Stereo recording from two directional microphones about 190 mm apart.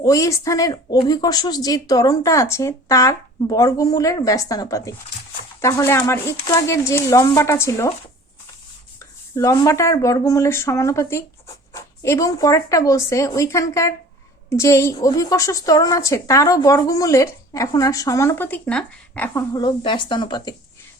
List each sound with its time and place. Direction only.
0.0 s a woman's voice: 15° left (ahead or behind)
9.3 s a woman's voice: 15° left (ahead or behind)